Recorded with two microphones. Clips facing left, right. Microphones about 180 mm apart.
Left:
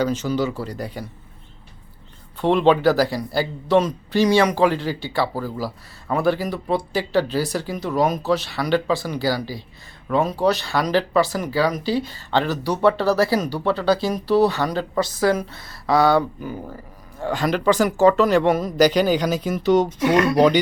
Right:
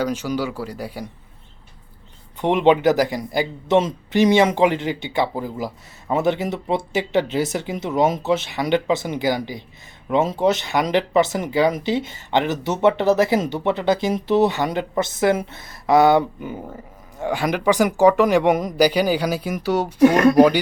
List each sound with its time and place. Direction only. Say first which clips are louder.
0.0 s speech: left 1 dB; 10° right (ahead or behind)
2.4 s speech: even; 20° right (ahead or behind)
20.0 s speech: right 4 dB; 45° right (ahead or behind)
20.3 s speech: right 2 dB; 10° right (ahead or behind)